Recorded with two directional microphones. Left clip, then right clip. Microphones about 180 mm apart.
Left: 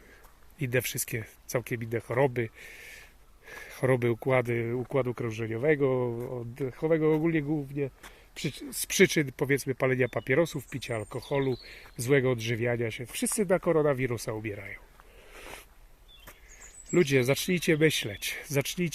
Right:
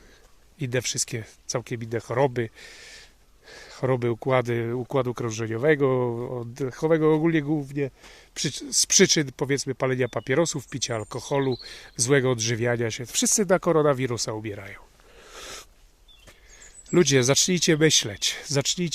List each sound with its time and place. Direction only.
0.6 s speech: 20° right (ahead or behind)
15.3 s a sound: 45° right (ahead or behind)
16.9 s speech: 35° right (ahead or behind)